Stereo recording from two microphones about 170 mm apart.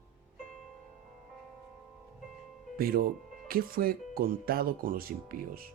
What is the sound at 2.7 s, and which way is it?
Speech, 60° right (ahead or behind).